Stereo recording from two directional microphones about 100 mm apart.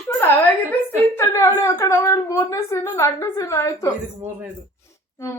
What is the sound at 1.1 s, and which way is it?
A woman's voice, 25° left (ahead or behind).